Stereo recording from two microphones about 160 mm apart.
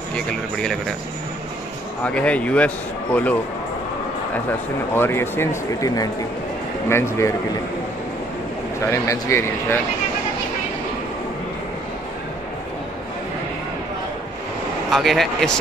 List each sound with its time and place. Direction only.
0.1 s speech: 5° left (ahead or behind)
2.0 s speech: 10° left (ahead or behind)
4.9 s speech: 15° left (ahead or behind)
8.8 s speech: 20° left (ahead or behind)
14.9 s speech: centre (ahead or behind)